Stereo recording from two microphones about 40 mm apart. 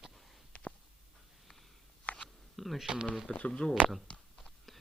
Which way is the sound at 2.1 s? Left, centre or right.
Left.